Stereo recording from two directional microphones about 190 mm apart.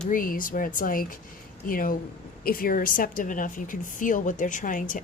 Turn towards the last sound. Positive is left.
turn(degrees=45)  # may be behind; listen again after turning